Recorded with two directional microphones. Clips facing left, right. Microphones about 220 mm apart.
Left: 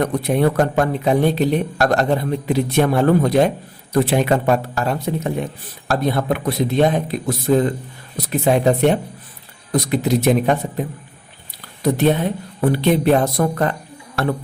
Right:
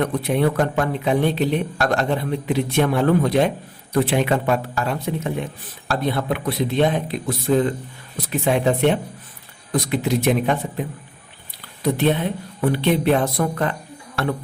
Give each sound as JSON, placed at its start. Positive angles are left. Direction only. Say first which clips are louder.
{"t": 0.0, "sound": "a man's voice", "louder": "left 2 dB", "side_deg": 40}